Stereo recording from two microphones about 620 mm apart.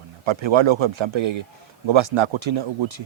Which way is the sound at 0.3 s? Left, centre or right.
Right.